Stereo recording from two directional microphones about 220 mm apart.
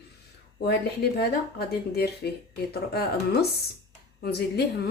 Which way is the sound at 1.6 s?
45° left (ahead or behind).